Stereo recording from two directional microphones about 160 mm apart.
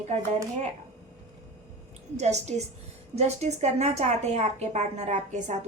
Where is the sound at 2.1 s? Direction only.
45° right (ahead or behind).